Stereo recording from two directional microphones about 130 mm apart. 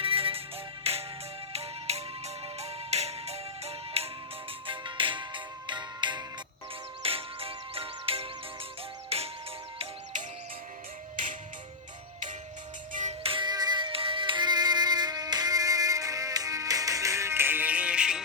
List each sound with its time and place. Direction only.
0.0 s music: 45° right (ahead or behind)
4.6 s music: 40° right (ahead or behind)
7.0 s music: 45° right (ahead or behind)
12.9 s music: 75° right (ahead or behind)
13.2 s music: 40° right (ahead or behind); by 18.2 s 5° right (ahead or behind)